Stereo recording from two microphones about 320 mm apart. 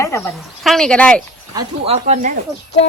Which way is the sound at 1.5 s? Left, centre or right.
Centre.